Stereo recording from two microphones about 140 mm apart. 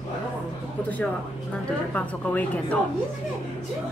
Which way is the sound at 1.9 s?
10° left (ahead or behind).